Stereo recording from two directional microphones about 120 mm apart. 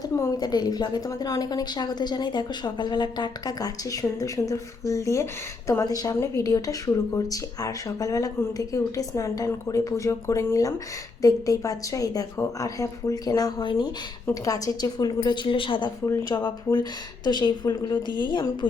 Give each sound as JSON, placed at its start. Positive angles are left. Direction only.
{"t": 0.2, "sound": "a woman's voice", "side_deg": 35}
{"t": 16.0, "sound": "a woman's voice", "side_deg": 25}